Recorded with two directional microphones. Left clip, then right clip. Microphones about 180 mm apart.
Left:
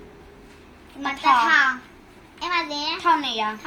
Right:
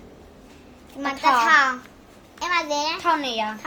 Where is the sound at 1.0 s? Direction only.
45° right (ahead or behind).